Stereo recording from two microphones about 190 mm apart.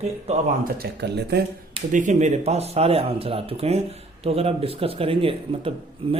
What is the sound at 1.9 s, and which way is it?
Speech, 40° right (ahead or behind).